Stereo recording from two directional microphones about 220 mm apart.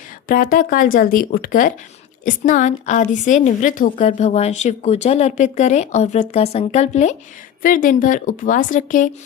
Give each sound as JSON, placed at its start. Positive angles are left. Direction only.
{"t": 0.3, "sound": "a woman's voice", "side_deg": 40}